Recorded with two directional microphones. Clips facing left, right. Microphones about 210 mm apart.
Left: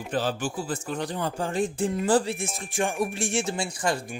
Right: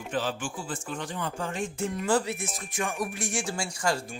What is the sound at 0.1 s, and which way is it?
Speech, 40° left (ahead or behind).